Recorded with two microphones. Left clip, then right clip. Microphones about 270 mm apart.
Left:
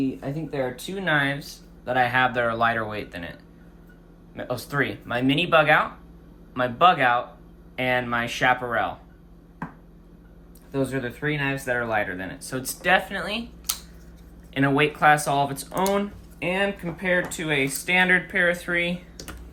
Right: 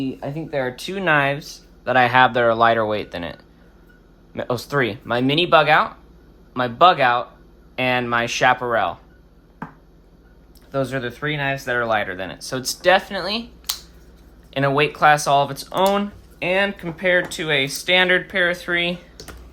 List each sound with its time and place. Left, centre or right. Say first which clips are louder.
0.2 s speech: right 4 dB; right
10.7 s speech: right 4 dB; right